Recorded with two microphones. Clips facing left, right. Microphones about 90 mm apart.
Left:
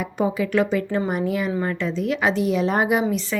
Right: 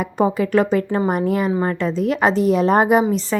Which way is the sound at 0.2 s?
45° right (ahead or behind).